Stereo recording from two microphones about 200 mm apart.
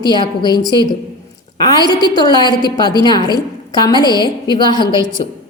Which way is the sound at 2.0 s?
20° left (ahead or behind).